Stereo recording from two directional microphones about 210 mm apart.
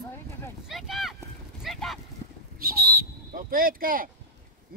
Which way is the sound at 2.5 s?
45° right (ahead or behind).